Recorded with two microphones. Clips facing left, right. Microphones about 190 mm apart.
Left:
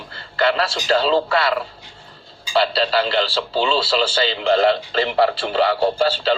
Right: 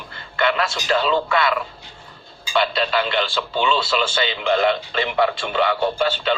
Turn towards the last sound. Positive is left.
turn(degrees=35)  # may be behind; listen again after turning